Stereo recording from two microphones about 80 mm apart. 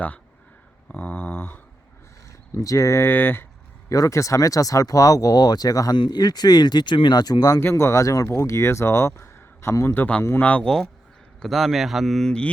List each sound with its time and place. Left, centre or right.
0.9 s a sound: left
2.6 s speech: left
3.8 s speech: left
7.6 s speech: left
10.4 s speech: centre
11.3 s speech: centre